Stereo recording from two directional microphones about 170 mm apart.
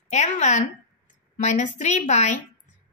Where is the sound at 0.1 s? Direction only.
45° left (ahead or behind).